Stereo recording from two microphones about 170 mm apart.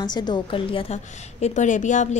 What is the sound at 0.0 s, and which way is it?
A woman's voice, 25° left (ahead or behind).